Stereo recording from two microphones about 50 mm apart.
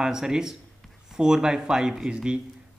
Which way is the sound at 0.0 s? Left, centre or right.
Centre.